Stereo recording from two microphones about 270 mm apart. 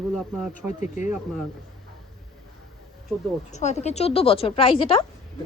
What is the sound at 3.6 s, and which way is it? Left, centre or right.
Speech, left.